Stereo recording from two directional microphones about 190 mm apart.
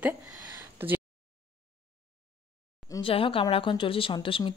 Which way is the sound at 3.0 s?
30° left (ahead or behind).